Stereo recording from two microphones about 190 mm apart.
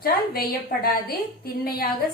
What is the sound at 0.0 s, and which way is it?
A woman's voice, 50° left (ahead or behind).